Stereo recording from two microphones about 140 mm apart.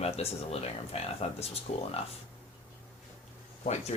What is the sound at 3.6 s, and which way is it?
Speech, 55° left (ahead or behind).